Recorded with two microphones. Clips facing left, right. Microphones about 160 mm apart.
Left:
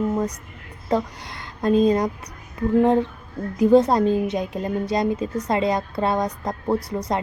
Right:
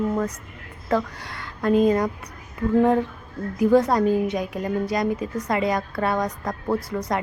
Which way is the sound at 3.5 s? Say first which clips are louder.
Left 2 dB; 25° left (ahead or behind).